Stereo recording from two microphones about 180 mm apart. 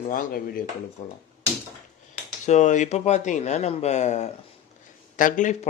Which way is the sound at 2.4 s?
40° left (ahead or behind).